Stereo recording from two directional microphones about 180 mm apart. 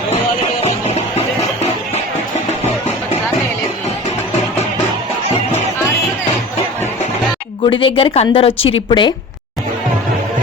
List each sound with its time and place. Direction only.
7.7 s a woman's voice: 30° left (ahead or behind)